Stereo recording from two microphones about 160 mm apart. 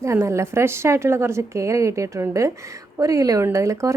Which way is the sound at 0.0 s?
20° right (ahead or behind).